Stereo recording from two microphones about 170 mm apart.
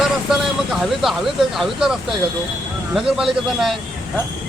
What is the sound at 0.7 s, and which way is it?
Speech, centre (ahead or behind).